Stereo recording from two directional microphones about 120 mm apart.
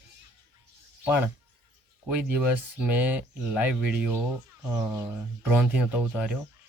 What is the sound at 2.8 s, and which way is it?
Speech, 15° right (ahead or behind).